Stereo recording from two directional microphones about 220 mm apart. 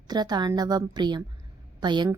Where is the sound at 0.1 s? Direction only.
20° right (ahead or behind).